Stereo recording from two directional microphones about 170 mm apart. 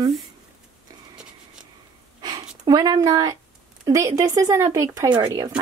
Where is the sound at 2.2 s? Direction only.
25° right (ahead or behind).